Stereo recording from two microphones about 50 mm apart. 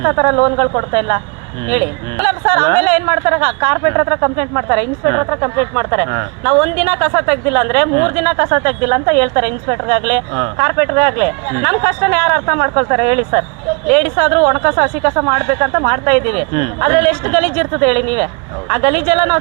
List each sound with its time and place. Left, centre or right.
0.0 s speech: centre
13.0 s speech: centre